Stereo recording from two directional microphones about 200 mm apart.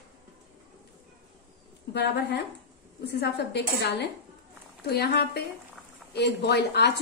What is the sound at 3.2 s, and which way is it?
A woman's voice, 55° left (ahead or behind).